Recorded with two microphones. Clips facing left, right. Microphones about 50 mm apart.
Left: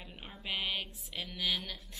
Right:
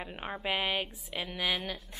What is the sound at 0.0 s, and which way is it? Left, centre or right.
Speech, right.